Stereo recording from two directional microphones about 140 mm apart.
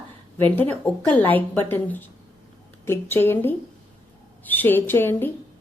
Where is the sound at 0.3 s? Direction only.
15° left (ahead or behind).